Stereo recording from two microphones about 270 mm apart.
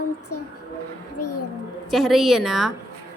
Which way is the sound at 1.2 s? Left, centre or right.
Left.